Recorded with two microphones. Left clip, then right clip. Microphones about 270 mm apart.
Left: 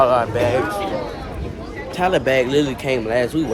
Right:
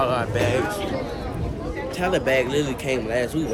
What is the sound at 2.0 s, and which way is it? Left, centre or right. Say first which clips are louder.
Speech: left 4 dB; centre.